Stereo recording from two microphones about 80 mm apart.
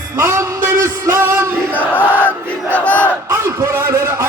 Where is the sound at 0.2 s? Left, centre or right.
Right.